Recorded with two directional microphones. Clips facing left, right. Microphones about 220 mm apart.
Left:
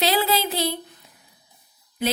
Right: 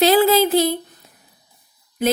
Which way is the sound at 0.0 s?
50° right (ahead or behind).